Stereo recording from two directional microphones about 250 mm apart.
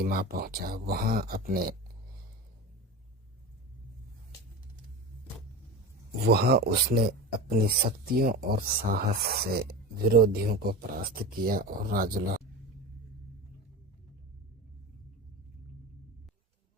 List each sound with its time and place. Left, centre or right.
0.0 s speech: right
6.2 s speech: right